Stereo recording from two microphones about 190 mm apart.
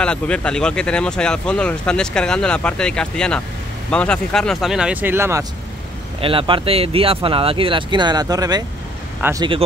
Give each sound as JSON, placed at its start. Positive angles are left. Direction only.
{"t": 0.0, "sound": "speech", "side_deg": 5}
{"t": 6.2, "sound": "speech", "side_deg": -25}